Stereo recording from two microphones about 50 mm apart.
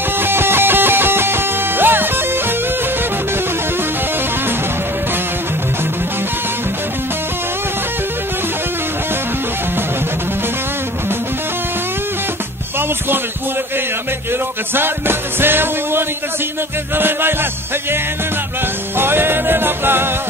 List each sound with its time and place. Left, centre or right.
0.2 s music: right
14.7 s music: right
18.9 s music: right